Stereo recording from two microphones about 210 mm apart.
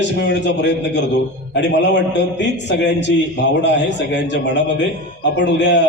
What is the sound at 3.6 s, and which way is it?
A man's voice, 55° left (ahead or behind).